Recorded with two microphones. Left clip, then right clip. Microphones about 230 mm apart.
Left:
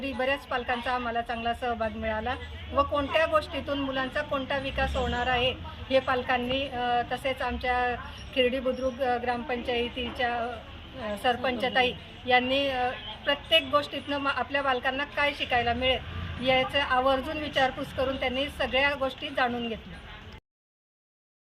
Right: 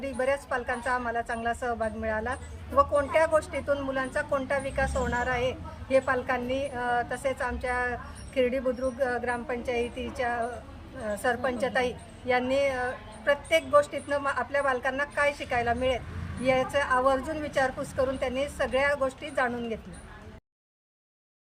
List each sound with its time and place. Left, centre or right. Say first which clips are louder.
0.0 s speech: right 1 dB; centre